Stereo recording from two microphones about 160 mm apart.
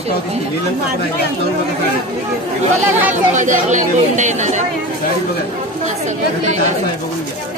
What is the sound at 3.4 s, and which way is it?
Speech, 50° right (ahead or behind).